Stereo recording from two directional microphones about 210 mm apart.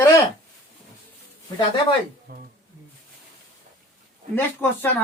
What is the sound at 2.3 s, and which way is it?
Speech, 45° right (ahead or behind).